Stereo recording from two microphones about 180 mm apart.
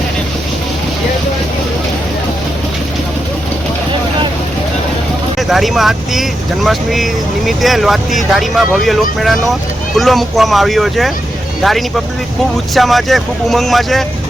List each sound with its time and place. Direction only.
5.4 s speech: centre (ahead or behind)